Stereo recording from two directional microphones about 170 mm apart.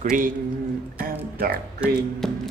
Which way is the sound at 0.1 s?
50° right (ahead or behind).